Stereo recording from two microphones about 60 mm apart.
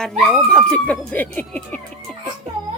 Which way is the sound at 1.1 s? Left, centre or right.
Left.